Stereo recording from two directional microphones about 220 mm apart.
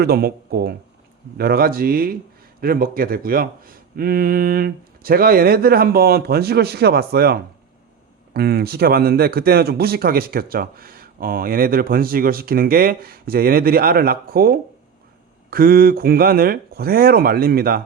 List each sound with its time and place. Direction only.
0.0 s speech: 45° right (ahead or behind)